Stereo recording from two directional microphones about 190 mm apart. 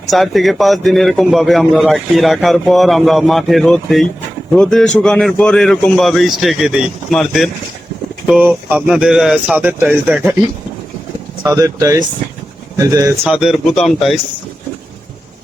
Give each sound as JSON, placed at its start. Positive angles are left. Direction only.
{"t": 0.1, "sound": "a man's voice", "side_deg": 0}
{"t": 11.4, "sound": "speech", "side_deg": -15}
{"t": 13.2, "sound": "a man's voice", "side_deg": -5}